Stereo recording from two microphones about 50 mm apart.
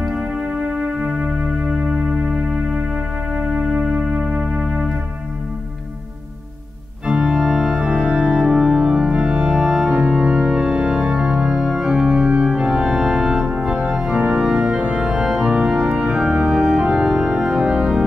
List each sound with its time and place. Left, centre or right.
0.6 s music: centre
3.7 s music: right
7.1 s organ: centre
15.0 s organ: centre
16.5 s organ: centre
16.8 s organ: centre
17.4 s music: centre